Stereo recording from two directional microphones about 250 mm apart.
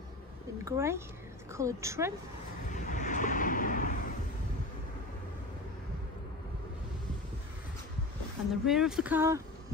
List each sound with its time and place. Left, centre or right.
0.7 s a woman's voice: centre
2.7 s vehicle: left
8.6 s speech: centre